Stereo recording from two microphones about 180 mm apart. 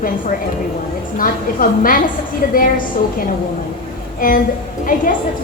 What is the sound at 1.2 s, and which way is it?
A woman's voice, 50° left (ahead or behind).